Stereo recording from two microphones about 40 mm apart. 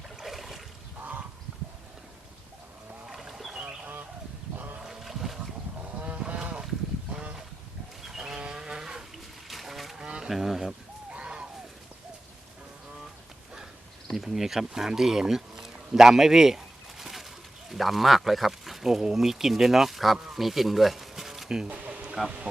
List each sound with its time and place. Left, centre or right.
0.2 s boat: centre
3.1 s a sound: centre
4.5 s wild animals: right
4.8 s boat: centre
5.8 s boat: right
8.0 s wild animals: centre
8.4 s vehicle: right
9.5 s a sound: centre
10.2 s speech: centre
11.1 s a sound: right
14.1 s speech: centre
20.2 s a sound: centre
21.7 s music: right